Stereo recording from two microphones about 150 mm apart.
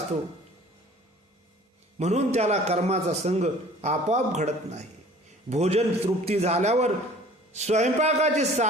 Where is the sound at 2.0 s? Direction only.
45° right (ahead or behind).